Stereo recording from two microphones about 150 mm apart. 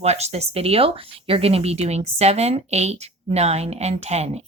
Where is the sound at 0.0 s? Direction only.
45° right (ahead or behind).